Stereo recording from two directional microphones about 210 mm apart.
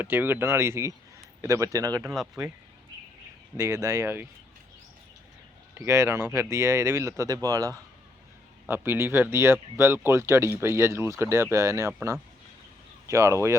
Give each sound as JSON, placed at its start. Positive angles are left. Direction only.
{"t": 0.0, "sound": "speech", "side_deg": -10}
{"t": 2.1, "sound": "speech", "side_deg": 0}
{"t": 3.6, "sound": "speech", "side_deg": -15}
{"t": 5.7, "sound": "speech", "side_deg": -10}